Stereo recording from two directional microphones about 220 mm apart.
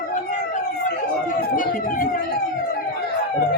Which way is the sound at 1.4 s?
40° left (ahead or behind).